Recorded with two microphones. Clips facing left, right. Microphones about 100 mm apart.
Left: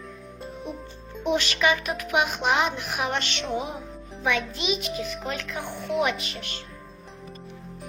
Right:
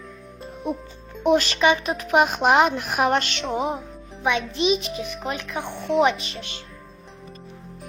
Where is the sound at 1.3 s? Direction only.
35° right (ahead or behind).